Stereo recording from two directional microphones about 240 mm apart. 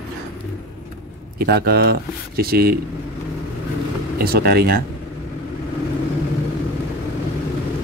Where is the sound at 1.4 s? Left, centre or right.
Right.